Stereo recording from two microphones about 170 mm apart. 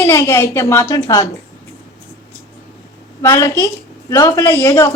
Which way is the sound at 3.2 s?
15° left (ahead or behind).